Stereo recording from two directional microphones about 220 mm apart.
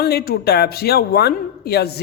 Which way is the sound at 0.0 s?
45° left (ahead or behind).